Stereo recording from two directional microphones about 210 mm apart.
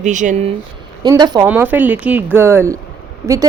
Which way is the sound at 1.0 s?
20° right (ahead or behind).